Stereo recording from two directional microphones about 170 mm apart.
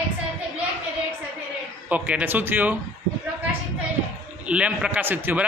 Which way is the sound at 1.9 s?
10° right (ahead or behind).